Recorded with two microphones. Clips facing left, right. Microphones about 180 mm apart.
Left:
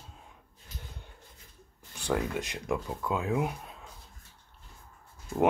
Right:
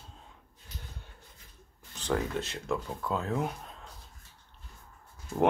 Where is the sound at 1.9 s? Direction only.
10° left (ahead or behind).